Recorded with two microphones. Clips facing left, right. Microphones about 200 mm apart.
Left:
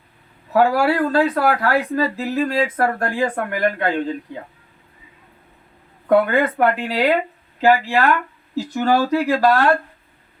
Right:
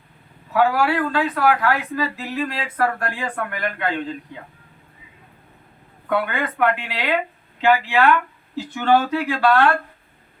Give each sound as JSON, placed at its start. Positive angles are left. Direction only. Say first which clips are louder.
{"t": 0.5, "sound": "speech", "louder": "left 3 dB", "side_deg": 40}
{"t": 6.1, "sound": "speech", "louder": "left 7 dB", "side_deg": 40}